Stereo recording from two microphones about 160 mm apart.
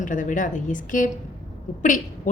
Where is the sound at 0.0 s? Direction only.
55° left (ahead or behind).